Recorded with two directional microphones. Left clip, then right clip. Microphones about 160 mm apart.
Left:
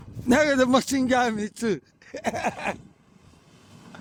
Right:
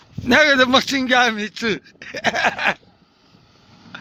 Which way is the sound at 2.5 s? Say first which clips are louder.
Right 9 dB; centre (ahead or behind).